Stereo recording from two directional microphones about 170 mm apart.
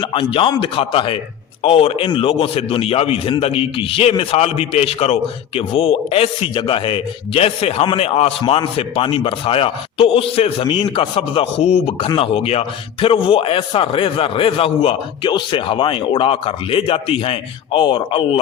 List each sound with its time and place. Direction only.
0.0 s a man's voice: 30° left (ahead or behind)